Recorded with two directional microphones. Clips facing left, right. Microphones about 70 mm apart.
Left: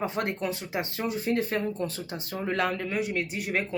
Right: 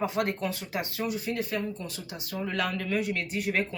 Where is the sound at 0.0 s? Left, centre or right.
Left.